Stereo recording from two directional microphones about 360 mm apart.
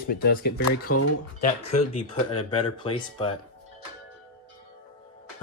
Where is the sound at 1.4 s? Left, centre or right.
Centre.